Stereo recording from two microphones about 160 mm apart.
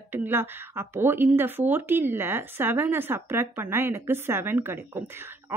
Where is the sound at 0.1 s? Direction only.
15° right (ahead or behind).